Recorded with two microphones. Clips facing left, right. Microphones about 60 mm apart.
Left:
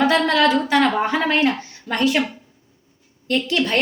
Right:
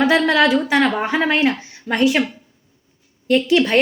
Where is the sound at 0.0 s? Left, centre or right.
Centre.